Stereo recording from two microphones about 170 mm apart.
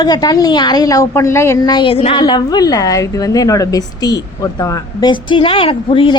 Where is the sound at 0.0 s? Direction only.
25° left (ahead or behind).